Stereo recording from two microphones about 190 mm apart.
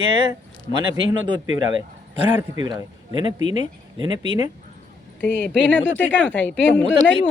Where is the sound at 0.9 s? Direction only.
80° right.